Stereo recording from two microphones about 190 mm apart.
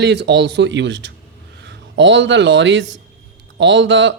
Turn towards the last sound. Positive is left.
turn(degrees=-70)  # may be behind; listen again after turning